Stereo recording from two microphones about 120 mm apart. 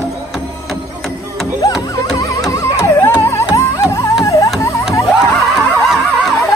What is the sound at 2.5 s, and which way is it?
Music, 25° left (ahead or behind).